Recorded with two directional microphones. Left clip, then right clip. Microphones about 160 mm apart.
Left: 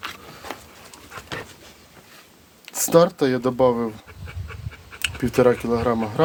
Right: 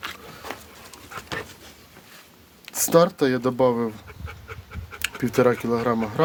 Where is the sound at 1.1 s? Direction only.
65° right (ahead or behind).